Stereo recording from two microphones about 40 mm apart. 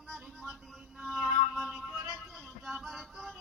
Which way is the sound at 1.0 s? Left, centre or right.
Centre.